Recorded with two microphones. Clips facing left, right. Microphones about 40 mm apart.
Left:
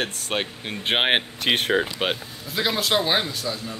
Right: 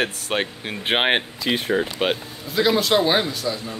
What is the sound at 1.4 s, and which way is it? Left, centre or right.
Speech, left.